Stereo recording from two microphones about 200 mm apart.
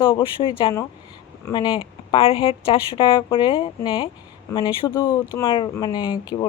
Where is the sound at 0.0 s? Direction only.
25° left (ahead or behind).